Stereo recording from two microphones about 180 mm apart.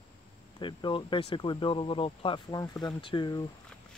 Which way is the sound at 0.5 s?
25° left (ahead or behind).